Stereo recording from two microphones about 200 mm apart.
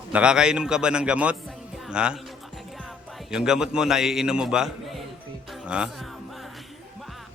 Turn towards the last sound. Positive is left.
turn(degrees=-5)  # may be behind; listen again after turning